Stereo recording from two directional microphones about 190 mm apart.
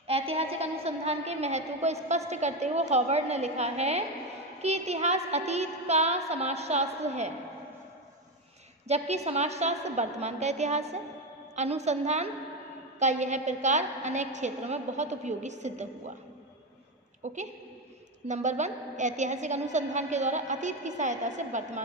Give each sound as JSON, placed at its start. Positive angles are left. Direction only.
{"t": 0.0, "sound": "a woman's voice", "side_deg": -30}
{"t": 8.8, "sound": "a woman's voice", "side_deg": -35}
{"t": 17.2, "sound": "a woman's voice", "side_deg": -40}